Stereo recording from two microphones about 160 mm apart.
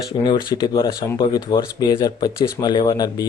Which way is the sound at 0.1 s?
25° left (ahead or behind).